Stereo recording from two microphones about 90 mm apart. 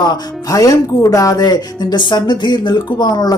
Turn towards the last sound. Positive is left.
turn(degrees=50)  # may be behind; listen again after turning